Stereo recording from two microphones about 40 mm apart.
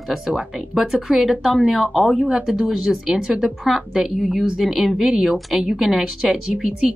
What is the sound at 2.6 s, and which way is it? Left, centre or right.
Speech, centre.